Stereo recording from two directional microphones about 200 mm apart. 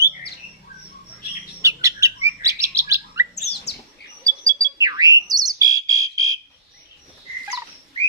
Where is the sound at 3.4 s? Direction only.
55° left (ahead or behind).